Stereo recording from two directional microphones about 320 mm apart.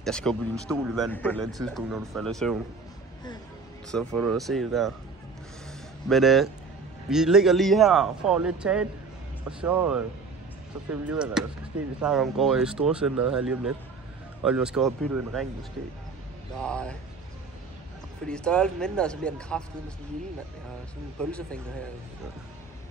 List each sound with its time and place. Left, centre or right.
0.0 s speech: centre
3.9 s speech: centre
6.0 s speech: centre
16.6 s speech: centre
18.2 s speech: centre
21.2 s speech: centre